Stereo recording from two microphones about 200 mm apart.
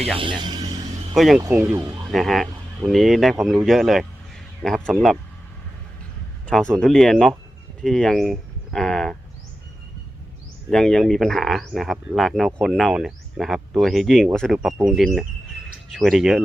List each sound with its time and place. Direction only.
0.2 s speech: 25° right (ahead or behind)
1.1 s speech: centre (ahead or behind)
1.4 s speech: 10° right (ahead or behind)
2.0 s speech: centre (ahead or behind)
6.5 s speech: 5° left (ahead or behind)
10.7 s speech: 5° left (ahead or behind)